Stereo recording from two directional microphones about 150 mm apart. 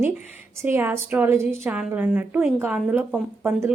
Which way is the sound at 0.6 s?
15° right (ahead or behind).